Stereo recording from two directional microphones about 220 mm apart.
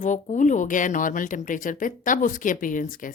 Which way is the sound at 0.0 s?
35° left (ahead or behind).